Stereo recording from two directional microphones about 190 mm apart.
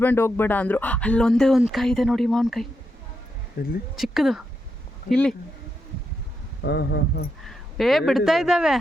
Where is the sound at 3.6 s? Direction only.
50° left (ahead or behind).